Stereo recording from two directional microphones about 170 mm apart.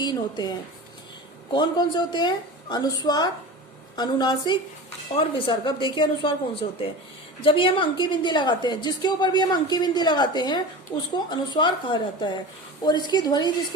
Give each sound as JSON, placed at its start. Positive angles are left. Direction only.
{"t": 0.0, "sound": "speech", "side_deg": 25}
{"t": 1.5, "sound": "a woman's voice", "side_deg": 25}